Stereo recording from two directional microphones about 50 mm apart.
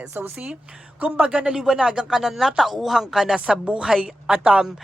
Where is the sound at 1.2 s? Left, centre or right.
Centre.